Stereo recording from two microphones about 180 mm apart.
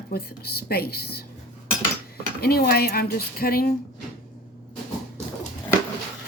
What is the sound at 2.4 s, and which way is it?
Speech, 60° left (ahead or behind).